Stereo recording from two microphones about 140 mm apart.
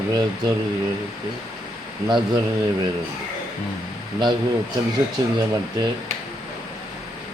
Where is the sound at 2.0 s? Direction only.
35° right (ahead or behind).